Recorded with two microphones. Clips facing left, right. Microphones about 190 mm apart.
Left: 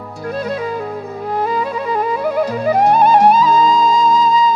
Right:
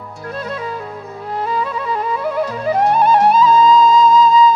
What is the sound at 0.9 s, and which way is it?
Music, 40° left (ahead or behind).